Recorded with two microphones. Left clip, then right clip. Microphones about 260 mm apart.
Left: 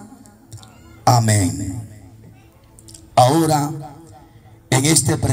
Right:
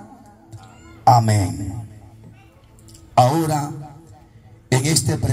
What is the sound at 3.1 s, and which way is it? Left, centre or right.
A man's voice, left.